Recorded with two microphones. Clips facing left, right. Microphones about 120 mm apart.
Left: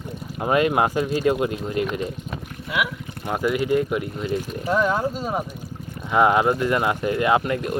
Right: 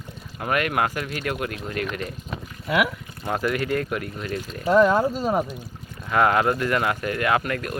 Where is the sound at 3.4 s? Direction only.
15° left (ahead or behind).